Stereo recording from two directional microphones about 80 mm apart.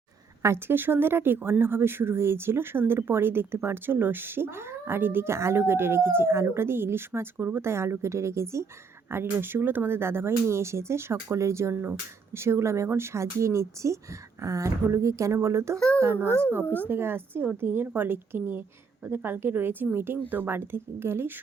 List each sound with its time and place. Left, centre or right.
0.4 s speech: right
16.6 s speech: left
16.9 s speech: right